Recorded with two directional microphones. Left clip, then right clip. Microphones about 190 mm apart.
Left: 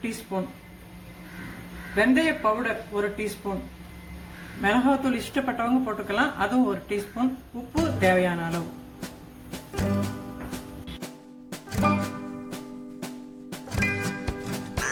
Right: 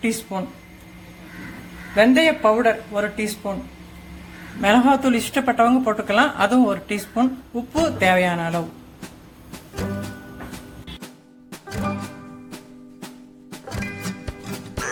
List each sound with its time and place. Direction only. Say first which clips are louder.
0.3 s speech: right 2 dB; 55° right (ahead or behind)
2.0 s speech: right 7 dB; 50° right (ahead or behind)
4.6 s speech: right 7 dB; 55° right (ahead or behind)
9.7 s music: even; centre (ahead or behind)
11.7 s music: left 3 dB; centre (ahead or behind)
13.7 s music: left 3 dB; centre (ahead or behind)